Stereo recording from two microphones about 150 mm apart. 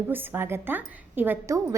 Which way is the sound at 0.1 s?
15° right (ahead or behind).